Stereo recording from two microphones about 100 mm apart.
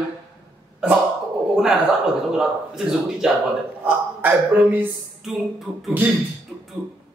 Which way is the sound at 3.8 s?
20° right (ahead or behind).